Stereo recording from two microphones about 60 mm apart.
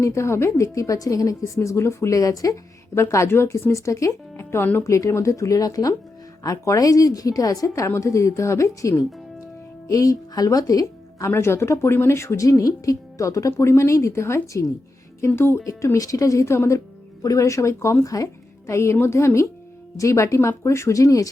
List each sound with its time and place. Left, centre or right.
0.0 s a woman's voice: left
2.9 s a woman's voice: left
7.9 s a woman's voice: left
9.9 s a woman's voice: left
11.3 s speech: left
12.5 s a woman's voice: left
15.4 s speech: left
15.8 s a woman's voice: left
17.2 s a woman's voice: left